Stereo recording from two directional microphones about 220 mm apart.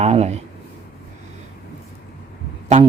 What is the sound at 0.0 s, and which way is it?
Speech, 30° right (ahead or behind).